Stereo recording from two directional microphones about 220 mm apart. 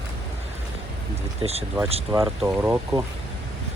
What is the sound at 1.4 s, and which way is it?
Speech, 25° right (ahead or behind).